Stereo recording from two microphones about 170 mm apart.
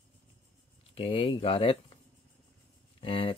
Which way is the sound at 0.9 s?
35° left (ahead or behind).